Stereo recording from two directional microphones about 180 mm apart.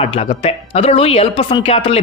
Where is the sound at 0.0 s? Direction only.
35° left (ahead or behind).